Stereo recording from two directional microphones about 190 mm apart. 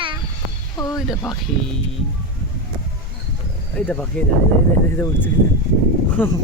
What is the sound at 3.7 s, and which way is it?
Speech, 5° left (ahead or behind).